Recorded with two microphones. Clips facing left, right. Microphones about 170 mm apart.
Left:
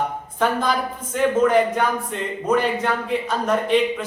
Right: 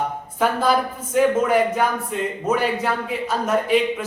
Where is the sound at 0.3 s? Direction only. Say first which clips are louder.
Right 2 dB; 5° right (ahead or behind).